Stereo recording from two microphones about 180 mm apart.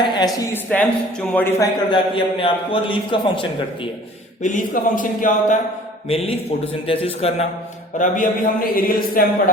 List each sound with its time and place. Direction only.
0.0 s a sound: 25° left (ahead or behind)
0.3 s a man's voice: 10° left (ahead or behind); by 3.4 s 30° left (ahead or behind)
4.4 s a man's voice: 45° left (ahead or behind)
6.1 s a man's voice: 35° left (ahead or behind)
7.9 s a man's voice: 45° left (ahead or behind)